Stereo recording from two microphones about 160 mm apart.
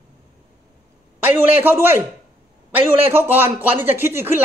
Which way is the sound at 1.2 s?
15° right (ahead or behind).